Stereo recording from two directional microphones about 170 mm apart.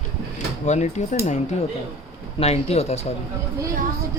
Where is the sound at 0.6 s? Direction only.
45° left (ahead or behind).